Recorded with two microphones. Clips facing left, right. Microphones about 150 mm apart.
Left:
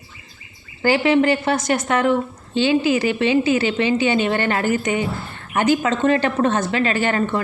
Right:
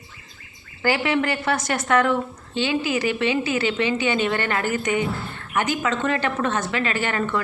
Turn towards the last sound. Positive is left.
turn(degrees=30)  # may be behind; listen again after turning